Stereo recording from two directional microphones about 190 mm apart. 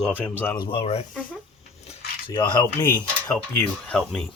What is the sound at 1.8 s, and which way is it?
Cutlery, 30° left (ahead or behind).